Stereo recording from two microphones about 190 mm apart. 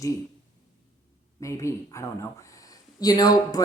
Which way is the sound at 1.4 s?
15° left (ahead or behind).